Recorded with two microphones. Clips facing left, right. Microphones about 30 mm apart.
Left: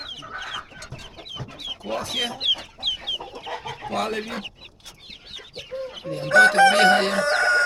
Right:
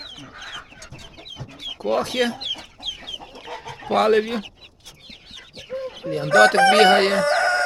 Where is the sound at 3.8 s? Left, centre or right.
Right.